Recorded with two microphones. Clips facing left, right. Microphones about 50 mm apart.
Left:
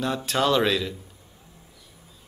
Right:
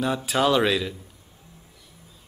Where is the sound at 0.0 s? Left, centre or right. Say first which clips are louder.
Right 2 dB; centre.